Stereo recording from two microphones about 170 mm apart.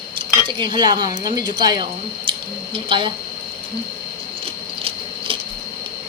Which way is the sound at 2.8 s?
30° right (ahead or behind).